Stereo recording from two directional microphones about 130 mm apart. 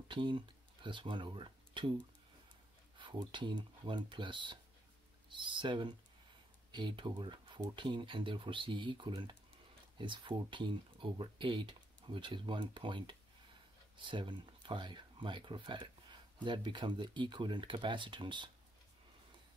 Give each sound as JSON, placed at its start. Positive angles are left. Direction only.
{"t": 0.1, "sound": "speech", "side_deg": -40}